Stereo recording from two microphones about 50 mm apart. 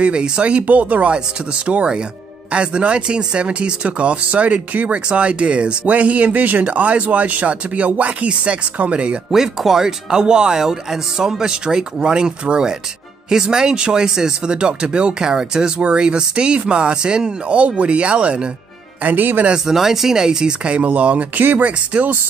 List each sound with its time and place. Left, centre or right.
0.0 s speech: right
9.3 s speech: centre
19.0 s speech: right
19.5 s speech: centre; by 22.1 s right